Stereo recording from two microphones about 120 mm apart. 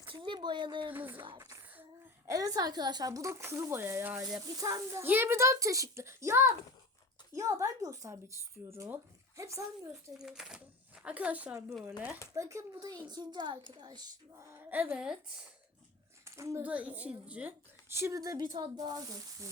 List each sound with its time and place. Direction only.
0.0 s a sound: 45° right (ahead or behind)
0.9 s speech: 15° right (ahead or behind)
2.2 s a woman's voice: 25° right (ahead or behind)
4.4 s a woman's voice: 30° right (ahead or behind)
5.0 s a woman's voice: 20° right (ahead or behind)
9.9 s speech: 5° right (ahead or behind)
12.3 s a woman's voice: 25° right (ahead or behind)
14.3 s speech: 15° right (ahead or behind)
16.2 s a sound: 25° right (ahead or behind)
16.6 s a woman's voice: 10° right (ahead or behind); by 19.5 s 30° right (ahead or behind)